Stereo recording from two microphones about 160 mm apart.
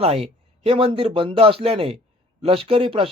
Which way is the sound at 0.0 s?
40° right (ahead or behind).